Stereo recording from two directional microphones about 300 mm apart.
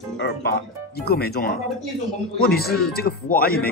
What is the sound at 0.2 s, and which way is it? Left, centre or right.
Speech, left.